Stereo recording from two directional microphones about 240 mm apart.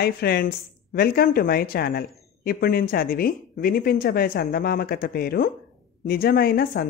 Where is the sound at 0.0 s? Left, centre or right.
Left.